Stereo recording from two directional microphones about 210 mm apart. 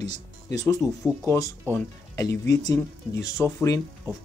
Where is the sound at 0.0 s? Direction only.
15° left (ahead or behind).